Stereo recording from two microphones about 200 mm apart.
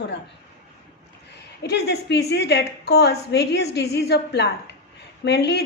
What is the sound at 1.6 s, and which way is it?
A woman's voice, 55° left (ahead or behind).